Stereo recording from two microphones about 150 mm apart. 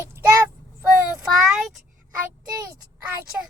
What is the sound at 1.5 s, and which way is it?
Speech, centre (ahead or behind).